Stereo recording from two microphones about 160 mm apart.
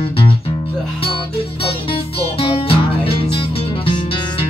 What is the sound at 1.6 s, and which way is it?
Music, 35° left (ahead or behind).